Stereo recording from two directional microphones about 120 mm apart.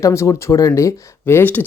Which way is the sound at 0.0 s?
25° left (ahead or behind).